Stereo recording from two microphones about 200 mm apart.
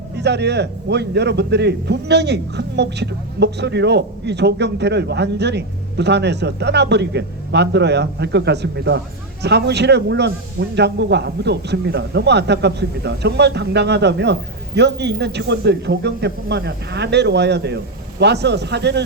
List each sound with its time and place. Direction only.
0.2 s a man's voice: 55° right (ahead or behind)